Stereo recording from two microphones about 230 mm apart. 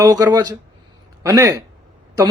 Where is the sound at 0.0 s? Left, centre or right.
Centre.